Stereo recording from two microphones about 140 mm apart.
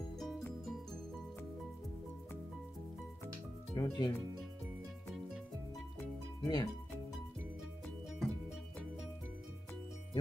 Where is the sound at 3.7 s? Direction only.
20° left (ahead or behind).